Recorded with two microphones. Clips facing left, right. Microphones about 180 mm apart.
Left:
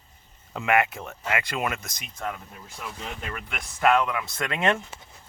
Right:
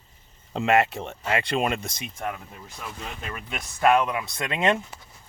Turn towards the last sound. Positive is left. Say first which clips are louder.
# right 1 dB
turn(degrees=-20)  # may be behind; listen again after turning